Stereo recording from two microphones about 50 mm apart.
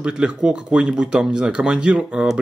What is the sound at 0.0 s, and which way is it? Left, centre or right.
Speech, centre.